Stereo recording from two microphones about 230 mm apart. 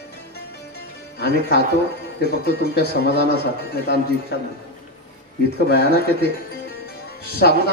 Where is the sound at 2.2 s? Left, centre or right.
Left.